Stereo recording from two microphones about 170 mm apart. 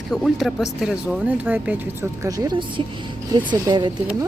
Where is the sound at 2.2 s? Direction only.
20° right (ahead or behind).